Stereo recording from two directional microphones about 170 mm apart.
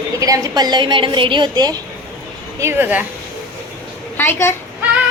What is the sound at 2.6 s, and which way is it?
Speech, 15° right (ahead or behind).